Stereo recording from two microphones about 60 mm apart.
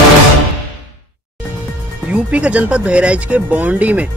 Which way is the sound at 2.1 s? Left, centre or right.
Right.